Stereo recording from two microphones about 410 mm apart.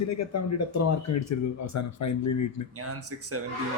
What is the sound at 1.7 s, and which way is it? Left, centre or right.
Speech, left.